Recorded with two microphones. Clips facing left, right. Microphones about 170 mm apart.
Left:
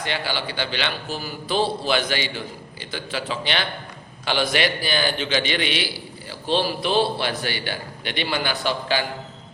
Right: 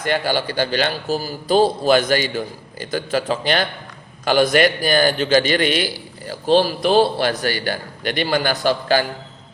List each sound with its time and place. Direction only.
0.0 s a man's voice: 45° right (ahead or behind)